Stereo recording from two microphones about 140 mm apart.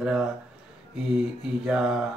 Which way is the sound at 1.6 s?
5° right (ahead or behind).